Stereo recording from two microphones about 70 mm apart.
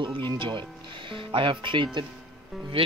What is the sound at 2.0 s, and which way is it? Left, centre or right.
Speech, right.